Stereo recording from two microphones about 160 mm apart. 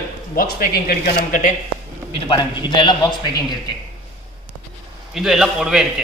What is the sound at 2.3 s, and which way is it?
Speech, 30° left (ahead or behind).